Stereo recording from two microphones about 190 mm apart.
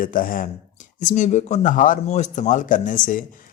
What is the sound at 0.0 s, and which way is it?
Speech, 45° left (ahead or behind).